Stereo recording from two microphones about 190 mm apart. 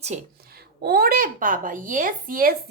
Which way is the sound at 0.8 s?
50° right (ahead or behind).